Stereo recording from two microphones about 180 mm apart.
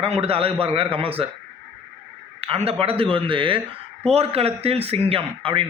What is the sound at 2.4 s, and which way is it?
Speech, 35° right (ahead or behind).